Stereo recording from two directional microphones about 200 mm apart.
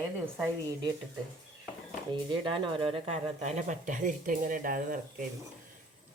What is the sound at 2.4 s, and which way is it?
Speech, 25° right (ahead or behind).